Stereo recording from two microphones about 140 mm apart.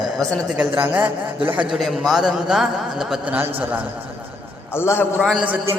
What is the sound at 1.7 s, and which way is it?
A man's voice, centre (ahead or behind).